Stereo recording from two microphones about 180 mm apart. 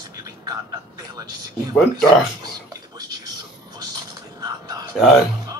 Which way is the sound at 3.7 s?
20° right (ahead or behind).